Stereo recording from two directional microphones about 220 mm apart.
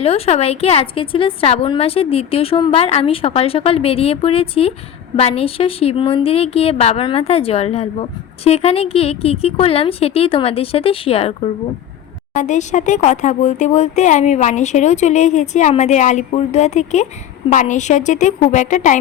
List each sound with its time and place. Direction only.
0.0 s a woman's voice: 25° left (ahead or behind)